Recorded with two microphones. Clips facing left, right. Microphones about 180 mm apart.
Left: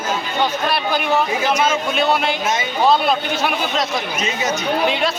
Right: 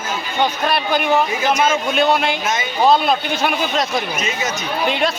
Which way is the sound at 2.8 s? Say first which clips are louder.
Right 1 dB; centre (ahead or behind).